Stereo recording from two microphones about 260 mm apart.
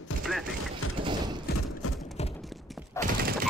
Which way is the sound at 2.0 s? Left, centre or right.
Left.